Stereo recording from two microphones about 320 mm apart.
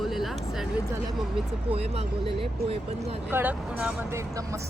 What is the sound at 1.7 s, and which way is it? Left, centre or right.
Speech, centre.